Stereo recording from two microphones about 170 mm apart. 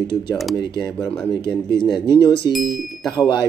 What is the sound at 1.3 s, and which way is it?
Speech, 25° left (ahead or behind).